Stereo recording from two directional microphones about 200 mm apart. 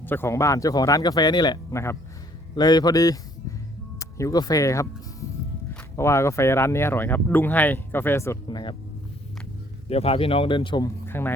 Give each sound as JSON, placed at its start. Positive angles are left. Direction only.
{"t": 0.0, "sound": "speech", "side_deg": 10}
{"t": 8.4, "sound": "speech", "side_deg": 25}
{"t": 9.9, "sound": "speech", "side_deg": 30}